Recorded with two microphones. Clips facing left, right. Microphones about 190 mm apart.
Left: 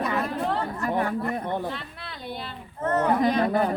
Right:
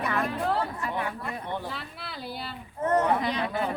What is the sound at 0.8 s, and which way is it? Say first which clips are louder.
Speech: left 6 dB; 45° left (ahead or behind).